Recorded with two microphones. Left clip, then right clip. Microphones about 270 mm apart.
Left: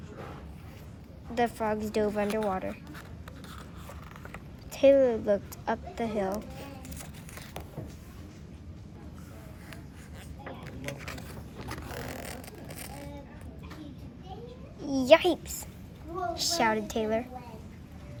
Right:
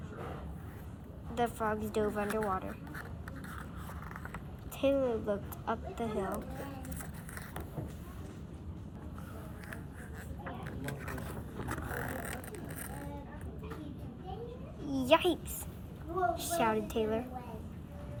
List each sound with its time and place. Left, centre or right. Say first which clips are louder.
1.4 s speech: left 5 dB; left
4.7 s speech: left 9 dB; left
10.4 s a sound: left 3 dB; centre
11.6 s vehicle: even; left
14.8 s a sound: left 7 dB; left
16.3 s speech: left 9 dB; left